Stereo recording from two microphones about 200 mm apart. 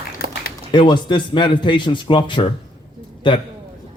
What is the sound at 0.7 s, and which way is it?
Speech, 20° left (ahead or behind).